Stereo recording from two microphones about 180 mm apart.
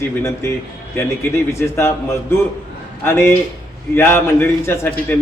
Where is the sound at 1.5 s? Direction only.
15° left (ahead or behind).